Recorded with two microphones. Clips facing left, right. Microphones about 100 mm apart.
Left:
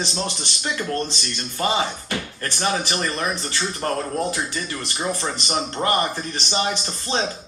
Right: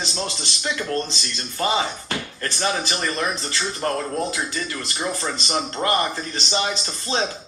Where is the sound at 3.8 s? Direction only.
25° right (ahead or behind).